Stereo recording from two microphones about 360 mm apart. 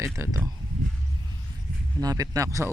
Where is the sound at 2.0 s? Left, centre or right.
Centre.